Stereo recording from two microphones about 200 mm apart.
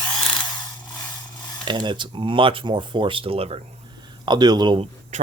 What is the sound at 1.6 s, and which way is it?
Speech, 25° right (ahead or behind).